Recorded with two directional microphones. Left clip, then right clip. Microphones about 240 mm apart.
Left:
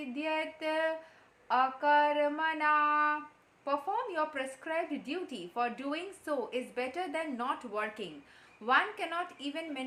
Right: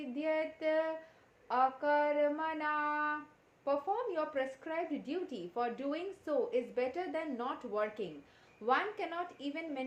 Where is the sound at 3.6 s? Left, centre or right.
Left.